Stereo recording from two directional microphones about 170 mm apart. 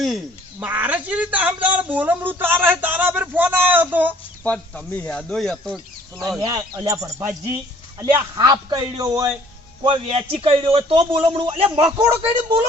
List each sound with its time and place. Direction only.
0.6 s speech: 10° right (ahead or behind)
4.4 s speech: 5° left (ahead or behind)
6.4 s a man's voice: 20° right (ahead or behind)
9.8 s a man's voice: 30° right (ahead or behind)
11.8 s speech: 15° right (ahead or behind)